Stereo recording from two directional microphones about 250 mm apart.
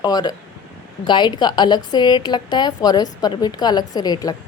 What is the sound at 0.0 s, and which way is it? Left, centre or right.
A woman's voice, centre.